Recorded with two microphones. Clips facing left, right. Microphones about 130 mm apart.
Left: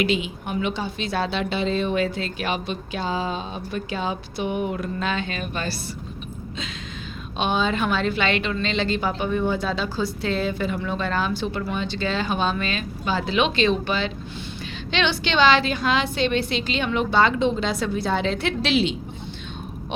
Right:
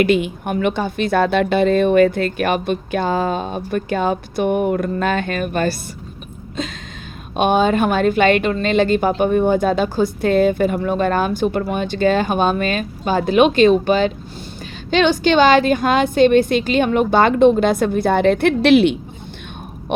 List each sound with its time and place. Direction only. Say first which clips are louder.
0.0 s speech: right 7 dB; 55° right (ahead or behind)
7.3 s speech: right 8 dB; 50° right (ahead or behind)